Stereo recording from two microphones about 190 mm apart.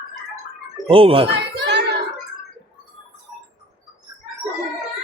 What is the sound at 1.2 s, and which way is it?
Children playing, 60° right (ahead or behind).